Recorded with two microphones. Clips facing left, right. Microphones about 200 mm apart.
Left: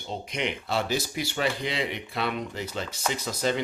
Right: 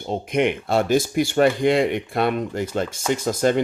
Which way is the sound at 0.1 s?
50° right (ahead or behind).